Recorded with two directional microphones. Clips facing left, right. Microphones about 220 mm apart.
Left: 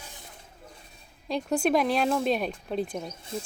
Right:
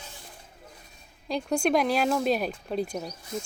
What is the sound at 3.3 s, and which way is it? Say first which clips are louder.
Speech: right 1 dB; 30° left (ahead or behind).